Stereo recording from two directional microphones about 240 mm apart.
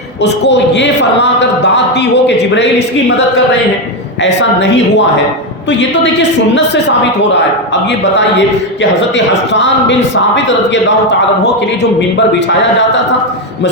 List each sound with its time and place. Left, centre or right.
0.2 s a man's voice: left
4.2 s a man's voice: left
7.7 s a man's voice: left